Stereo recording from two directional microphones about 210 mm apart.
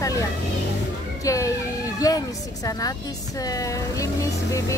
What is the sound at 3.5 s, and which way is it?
Speech, 15° left (ahead or behind).